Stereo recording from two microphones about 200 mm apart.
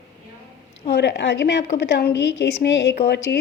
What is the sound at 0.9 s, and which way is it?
A woman's voice, 60° left (ahead or behind).